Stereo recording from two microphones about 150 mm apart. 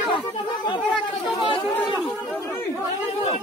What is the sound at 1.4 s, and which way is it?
Speech, 35° left (ahead or behind).